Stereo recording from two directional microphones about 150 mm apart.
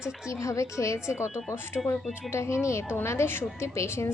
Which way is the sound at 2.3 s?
20° left (ahead or behind).